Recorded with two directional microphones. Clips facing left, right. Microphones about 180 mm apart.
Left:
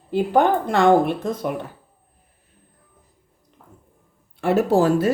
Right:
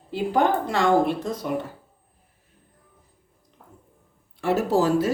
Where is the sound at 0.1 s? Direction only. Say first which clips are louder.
Left 4 dB; 55° left (ahead or behind).